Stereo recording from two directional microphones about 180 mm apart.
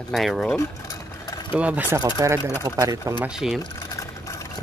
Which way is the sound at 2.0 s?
20° right (ahead or behind).